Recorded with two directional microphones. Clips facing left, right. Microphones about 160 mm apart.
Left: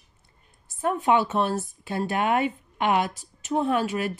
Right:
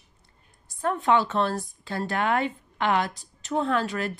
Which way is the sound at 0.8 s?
15° left (ahead or behind).